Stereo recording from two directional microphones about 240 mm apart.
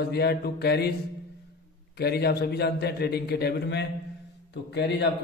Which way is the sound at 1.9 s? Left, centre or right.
Left.